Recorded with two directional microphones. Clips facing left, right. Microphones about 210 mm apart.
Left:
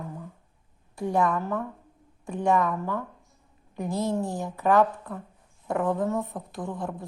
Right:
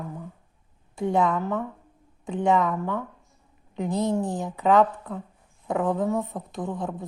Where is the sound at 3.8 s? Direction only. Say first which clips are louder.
Right 2 dB; 20° right (ahead or behind).